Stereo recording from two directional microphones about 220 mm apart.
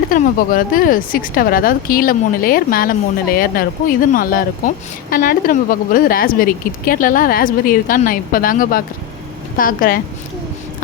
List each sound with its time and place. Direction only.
0.1 s a woman's voice: 40° left (ahead or behind)